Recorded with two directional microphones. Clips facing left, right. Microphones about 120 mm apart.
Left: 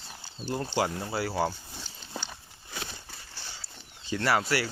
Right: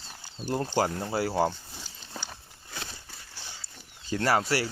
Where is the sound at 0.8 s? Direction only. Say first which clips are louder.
Right 2 dB; 45° right (ahead or behind).